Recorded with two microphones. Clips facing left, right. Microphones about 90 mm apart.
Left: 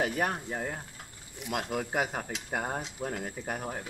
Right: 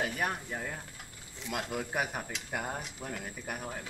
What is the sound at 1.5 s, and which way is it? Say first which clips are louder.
Speech: left 3 dB; 25° left (ahead or behind).